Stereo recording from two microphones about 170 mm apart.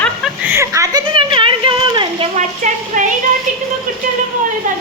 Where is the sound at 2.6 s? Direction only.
45° right (ahead or behind).